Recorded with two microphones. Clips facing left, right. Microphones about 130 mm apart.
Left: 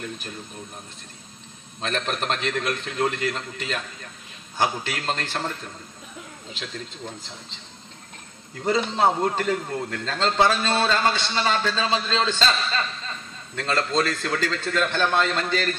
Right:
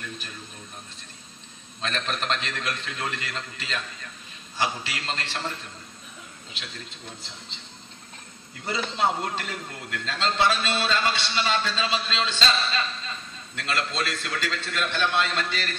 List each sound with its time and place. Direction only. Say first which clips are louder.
1.8 s a man's voice: left 3 dB; 50° left (ahead or behind)
8.6 s a man's voice: left 5 dB; 40° left (ahead or behind)